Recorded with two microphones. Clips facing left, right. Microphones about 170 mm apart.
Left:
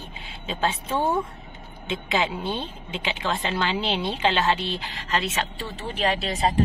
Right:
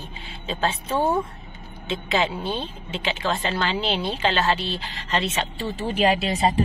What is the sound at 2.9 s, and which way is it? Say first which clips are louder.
Speech: right 2 dB; 15° left (ahead or behind).